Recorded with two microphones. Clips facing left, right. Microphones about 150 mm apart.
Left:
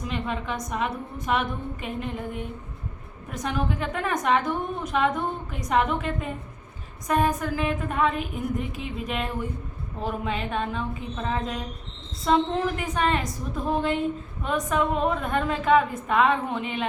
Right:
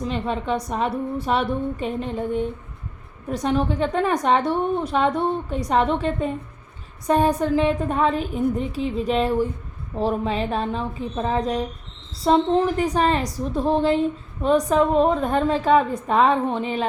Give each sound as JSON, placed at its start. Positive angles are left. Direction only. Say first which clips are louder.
{"t": 0.0, "sound": "a woman's voice", "louder": "right 5 dB", "side_deg": -35}